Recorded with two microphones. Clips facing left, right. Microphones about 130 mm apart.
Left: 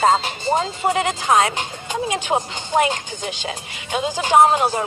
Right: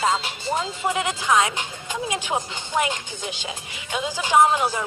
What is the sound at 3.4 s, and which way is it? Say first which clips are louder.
Speech: left 4 dB; 55° left (ahead or behind).